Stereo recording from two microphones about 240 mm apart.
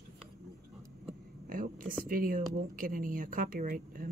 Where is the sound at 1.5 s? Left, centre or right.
Right.